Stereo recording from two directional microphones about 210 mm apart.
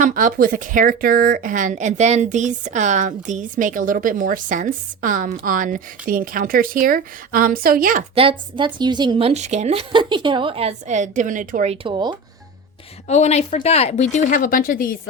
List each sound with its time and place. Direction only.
0.0 s a woman's voice: 40° right (ahead or behind)
8.1 s a woman's voice: 25° right (ahead or behind)
13.1 s speech: 30° left (ahead or behind)